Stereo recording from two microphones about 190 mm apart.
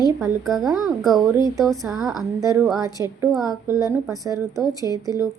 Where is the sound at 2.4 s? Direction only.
15° right (ahead or behind).